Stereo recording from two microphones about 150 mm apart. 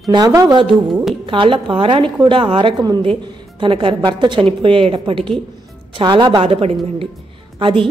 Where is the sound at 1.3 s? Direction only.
35° right (ahead or behind).